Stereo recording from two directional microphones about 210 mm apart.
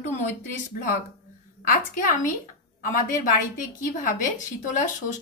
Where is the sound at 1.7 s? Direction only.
40° left (ahead or behind).